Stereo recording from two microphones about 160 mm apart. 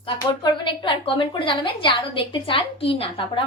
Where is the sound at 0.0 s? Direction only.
30° left (ahead or behind).